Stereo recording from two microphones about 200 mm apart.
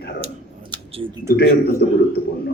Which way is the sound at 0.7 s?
25° right (ahead or behind).